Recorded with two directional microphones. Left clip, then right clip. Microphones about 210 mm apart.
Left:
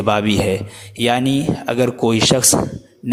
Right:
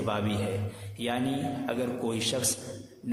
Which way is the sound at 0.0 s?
45° left (ahead or behind).